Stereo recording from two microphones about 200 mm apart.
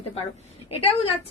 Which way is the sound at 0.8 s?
30° left (ahead or behind).